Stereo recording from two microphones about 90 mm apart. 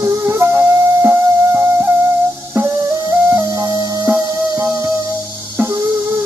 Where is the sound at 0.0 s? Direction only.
30° right (ahead or behind).